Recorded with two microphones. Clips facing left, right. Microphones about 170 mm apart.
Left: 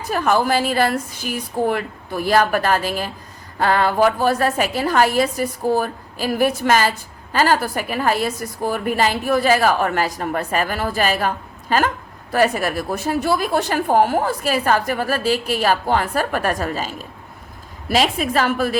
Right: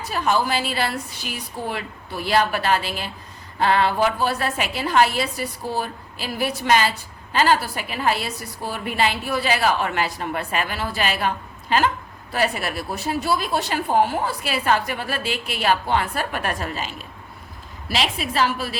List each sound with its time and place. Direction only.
0.0 s a woman's voice: 45° left (ahead or behind)